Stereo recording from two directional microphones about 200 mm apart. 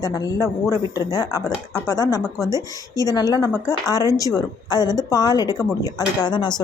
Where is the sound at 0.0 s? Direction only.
20° left (ahead or behind).